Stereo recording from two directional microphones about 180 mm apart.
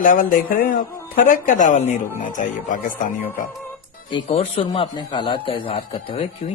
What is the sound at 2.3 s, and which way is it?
Speech, 45° left (ahead or behind).